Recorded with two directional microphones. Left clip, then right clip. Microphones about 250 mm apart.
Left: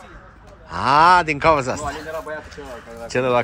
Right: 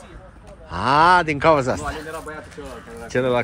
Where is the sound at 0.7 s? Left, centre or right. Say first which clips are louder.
Left 2 dB; centre.